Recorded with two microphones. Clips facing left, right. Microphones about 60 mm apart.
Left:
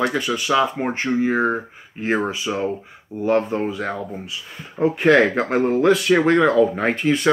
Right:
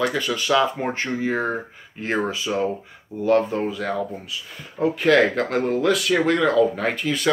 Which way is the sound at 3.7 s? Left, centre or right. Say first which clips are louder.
Even; left.